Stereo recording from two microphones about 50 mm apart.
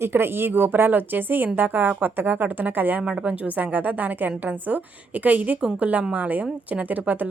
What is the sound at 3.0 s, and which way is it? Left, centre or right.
A woman's voice, right.